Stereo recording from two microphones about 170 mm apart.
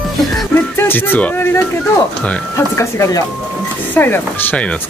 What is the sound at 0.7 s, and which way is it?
Speech, 10° left (ahead or behind).